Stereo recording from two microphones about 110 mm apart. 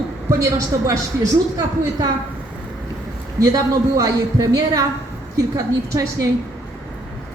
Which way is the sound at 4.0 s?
30° right (ahead or behind).